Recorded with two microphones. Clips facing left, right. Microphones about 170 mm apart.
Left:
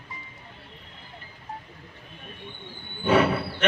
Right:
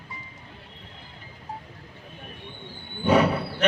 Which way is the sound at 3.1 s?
40° right (ahead or behind).